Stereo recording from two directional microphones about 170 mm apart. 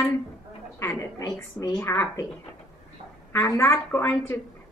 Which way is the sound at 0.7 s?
15° left (ahead or behind).